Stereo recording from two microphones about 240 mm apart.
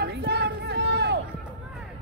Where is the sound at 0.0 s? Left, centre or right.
Right.